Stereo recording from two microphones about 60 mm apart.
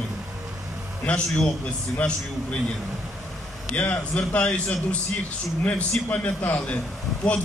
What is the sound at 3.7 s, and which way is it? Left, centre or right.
A man's voice, left.